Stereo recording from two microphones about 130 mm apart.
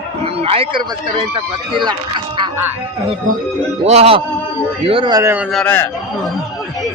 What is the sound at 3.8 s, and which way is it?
Speech, 55° right (ahead or behind).